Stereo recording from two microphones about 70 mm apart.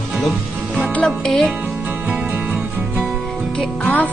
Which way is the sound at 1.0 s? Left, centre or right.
Centre.